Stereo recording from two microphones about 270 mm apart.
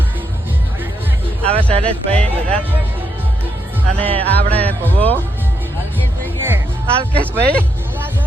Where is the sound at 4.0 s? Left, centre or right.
Centre.